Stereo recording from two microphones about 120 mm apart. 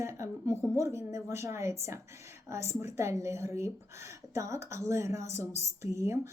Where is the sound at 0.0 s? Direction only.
25° right (ahead or behind).